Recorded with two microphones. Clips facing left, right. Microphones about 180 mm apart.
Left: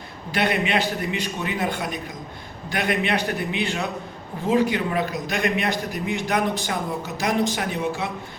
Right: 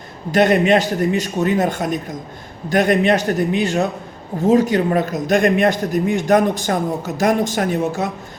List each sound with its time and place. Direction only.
0.3 s a man's voice: 45° right (ahead or behind)